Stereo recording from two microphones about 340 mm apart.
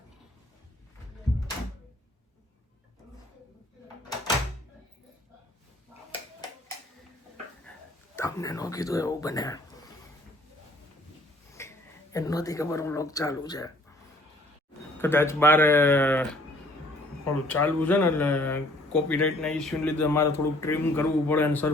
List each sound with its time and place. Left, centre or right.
8.1 s speech: centre
11.6 s a sound: centre
12.1 s speech: centre
14.9 s speech: centre